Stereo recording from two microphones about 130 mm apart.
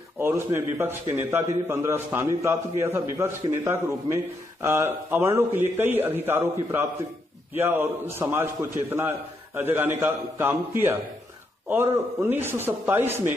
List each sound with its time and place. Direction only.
0.2 s a man's voice: 15° right (ahead or behind)
7.5 s a man's voice: 15° right (ahead or behind)